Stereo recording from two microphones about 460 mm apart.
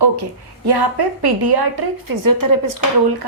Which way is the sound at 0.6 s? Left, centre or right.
Right.